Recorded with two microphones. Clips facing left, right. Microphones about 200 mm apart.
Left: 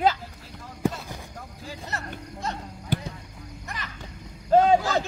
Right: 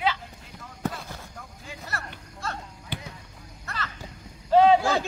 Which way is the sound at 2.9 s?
45° left (ahead or behind).